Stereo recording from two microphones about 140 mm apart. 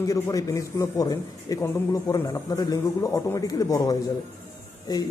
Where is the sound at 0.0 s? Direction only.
25° left (ahead or behind).